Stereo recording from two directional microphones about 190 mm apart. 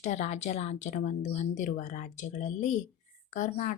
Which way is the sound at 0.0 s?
35° left (ahead or behind).